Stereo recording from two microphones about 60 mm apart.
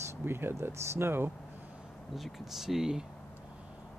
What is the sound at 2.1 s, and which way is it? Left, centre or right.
Speech, centre.